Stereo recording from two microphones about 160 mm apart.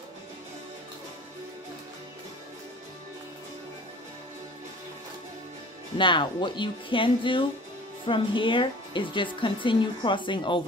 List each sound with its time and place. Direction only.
5.9 s a woman's voice: 30° left (ahead or behind)